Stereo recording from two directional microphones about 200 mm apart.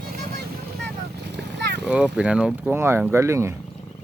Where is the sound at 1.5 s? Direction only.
55° right (ahead or behind).